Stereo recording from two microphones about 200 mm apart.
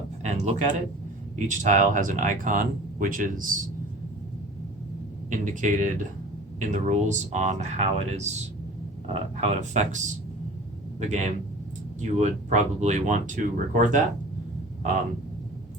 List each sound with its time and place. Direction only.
0.2 s speech: 35° right (ahead or behind)
5.3 s speech: 40° right (ahead or behind)